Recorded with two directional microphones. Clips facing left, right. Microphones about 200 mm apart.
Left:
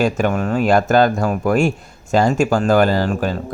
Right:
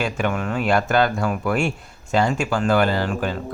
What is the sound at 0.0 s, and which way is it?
Speech, 40° left (ahead or behind).